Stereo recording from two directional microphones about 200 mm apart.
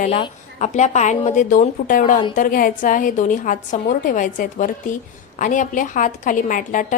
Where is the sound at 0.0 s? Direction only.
35° left (ahead or behind).